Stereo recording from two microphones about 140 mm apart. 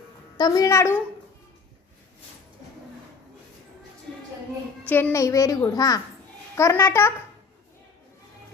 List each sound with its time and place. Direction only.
0.3 s a child's voice: 25° left (ahead or behind)
4.9 s a child's voice: 15° left (ahead or behind)